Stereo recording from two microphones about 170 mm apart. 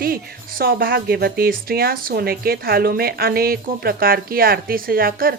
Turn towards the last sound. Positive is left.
turn(degrees=-60)  # may be behind; listen again after turning